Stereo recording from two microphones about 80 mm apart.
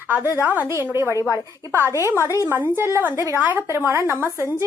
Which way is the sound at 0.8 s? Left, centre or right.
Right.